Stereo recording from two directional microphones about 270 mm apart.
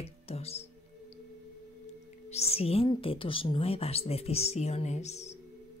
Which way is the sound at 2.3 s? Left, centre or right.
Left.